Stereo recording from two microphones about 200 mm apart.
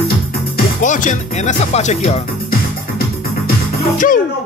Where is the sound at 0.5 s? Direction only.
40° left (ahead or behind).